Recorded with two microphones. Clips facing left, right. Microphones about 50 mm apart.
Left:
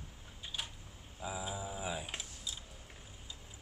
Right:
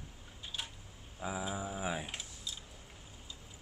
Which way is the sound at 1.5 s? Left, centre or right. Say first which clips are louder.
Right 3 dB; right.